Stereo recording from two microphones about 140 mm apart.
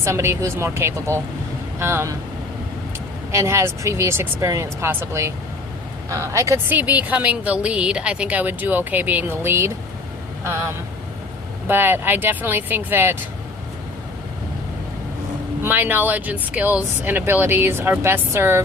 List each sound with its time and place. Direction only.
0.0 s a woman's voice: 20° right (ahead or behind)
3.3 s a woman's voice: 20° right (ahead or behind)
11.7 s a woman's voice: 15° right (ahead or behind)
15.6 s a woman's voice: 15° right (ahead or behind)